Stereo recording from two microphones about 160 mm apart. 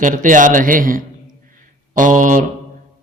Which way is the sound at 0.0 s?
55° right (ahead or behind).